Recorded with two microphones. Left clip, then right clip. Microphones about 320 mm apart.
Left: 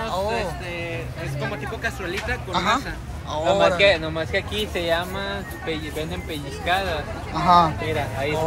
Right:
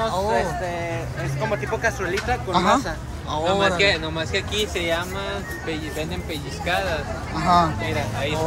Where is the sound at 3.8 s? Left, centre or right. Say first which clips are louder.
Left 2 dB; centre.